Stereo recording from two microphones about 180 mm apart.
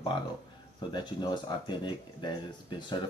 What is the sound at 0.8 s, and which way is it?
Speech, 25° left (ahead or behind).